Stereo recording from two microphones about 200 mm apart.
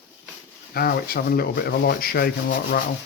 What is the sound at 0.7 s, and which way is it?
Speech, 50° left (ahead or behind).